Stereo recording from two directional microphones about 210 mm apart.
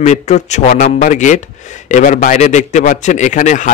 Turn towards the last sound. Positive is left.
turn(degrees=35)  # may be behind; listen again after turning